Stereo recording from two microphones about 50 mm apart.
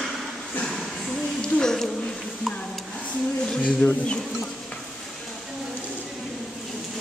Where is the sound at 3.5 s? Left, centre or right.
Centre.